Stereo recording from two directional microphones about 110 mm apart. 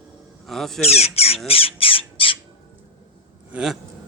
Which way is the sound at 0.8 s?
70° left (ahead or behind).